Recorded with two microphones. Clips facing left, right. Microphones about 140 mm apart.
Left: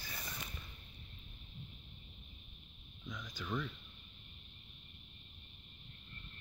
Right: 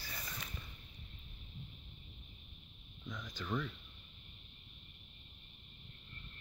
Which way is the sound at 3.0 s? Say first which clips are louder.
Right 1 dB; 10° right (ahead or behind).